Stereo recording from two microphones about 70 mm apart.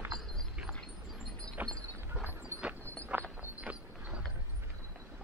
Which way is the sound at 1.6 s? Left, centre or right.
Right.